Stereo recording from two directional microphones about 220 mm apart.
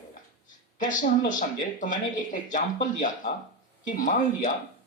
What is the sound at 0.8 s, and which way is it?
Speech, 35° left (ahead or behind).